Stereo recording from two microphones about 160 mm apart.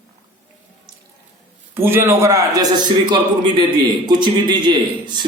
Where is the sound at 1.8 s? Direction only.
15° right (ahead or behind).